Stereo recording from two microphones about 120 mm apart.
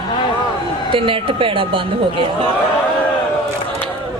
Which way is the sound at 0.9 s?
45° right (ahead or behind).